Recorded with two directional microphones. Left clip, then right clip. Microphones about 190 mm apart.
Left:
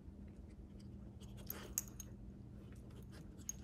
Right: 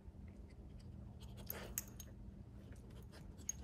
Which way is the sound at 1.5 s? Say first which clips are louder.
Left 2 dB; 15° left (ahead or behind).